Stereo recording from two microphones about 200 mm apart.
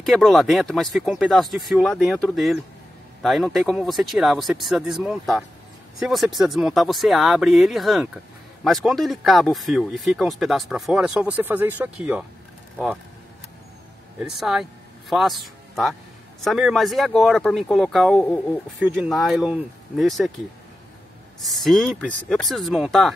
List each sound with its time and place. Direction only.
0.0 s speech: centre (ahead or behind)
14.2 s a man's voice: 5° right (ahead or behind)
21.4 s speech: centre (ahead or behind)